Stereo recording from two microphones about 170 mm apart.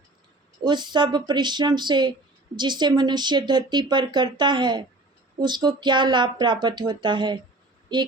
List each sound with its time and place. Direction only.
0.6 s speech: 25° right (ahead or behind)